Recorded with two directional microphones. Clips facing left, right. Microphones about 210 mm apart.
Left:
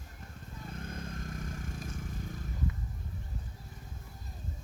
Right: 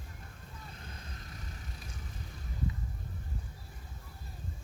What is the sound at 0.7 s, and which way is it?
Vehicle, 50° left (ahead or behind).